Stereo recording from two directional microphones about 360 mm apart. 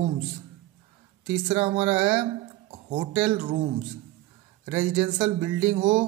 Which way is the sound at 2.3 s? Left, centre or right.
Centre.